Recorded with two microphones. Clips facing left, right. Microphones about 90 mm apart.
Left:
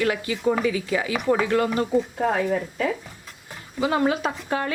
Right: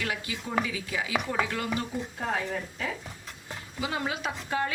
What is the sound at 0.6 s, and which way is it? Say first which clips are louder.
Speech: left 9 dB; 55° left (ahead or behind).